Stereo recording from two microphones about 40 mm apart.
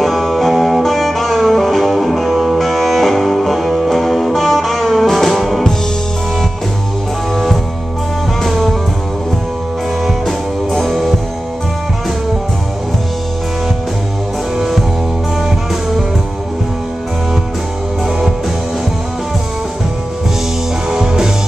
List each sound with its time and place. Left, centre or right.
0.0 s music: centre
10.2 s music: centre
14.6 s music: centre
20.9 s music: centre